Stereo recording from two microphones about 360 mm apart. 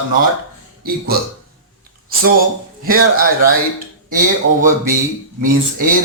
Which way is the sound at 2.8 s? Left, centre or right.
Right.